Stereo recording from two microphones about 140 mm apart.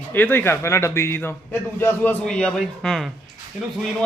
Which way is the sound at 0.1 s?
15° left (ahead or behind).